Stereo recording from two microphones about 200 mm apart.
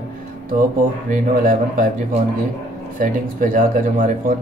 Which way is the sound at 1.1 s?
40° right (ahead or behind).